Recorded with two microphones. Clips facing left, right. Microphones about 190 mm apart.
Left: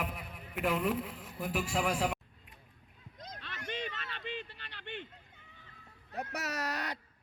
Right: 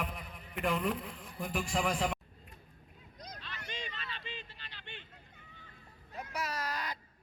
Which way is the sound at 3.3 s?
60° left (ahead or behind).